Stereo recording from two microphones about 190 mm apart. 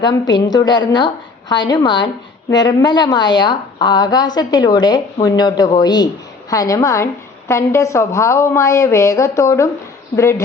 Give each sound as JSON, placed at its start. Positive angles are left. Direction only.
{"t": 0.0, "sound": "a woman's voice", "side_deg": 20}